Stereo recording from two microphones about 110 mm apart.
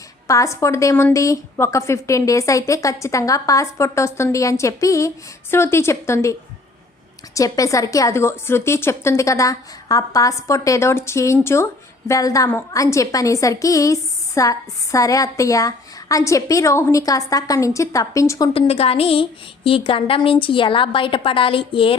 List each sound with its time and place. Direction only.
0.3 s a woman's voice: 30° left (ahead or behind)
7.3 s a woman's voice: 30° left (ahead or behind)
18.5 s a woman's voice: 65° left (ahead or behind)